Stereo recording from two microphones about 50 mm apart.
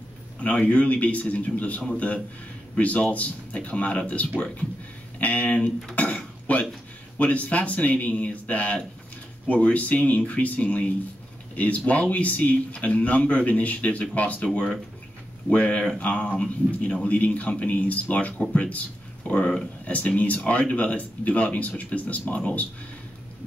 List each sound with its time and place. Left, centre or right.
0.4 s a man's voice: left
5.9 s dishes: left
7.2 s a man's voice: left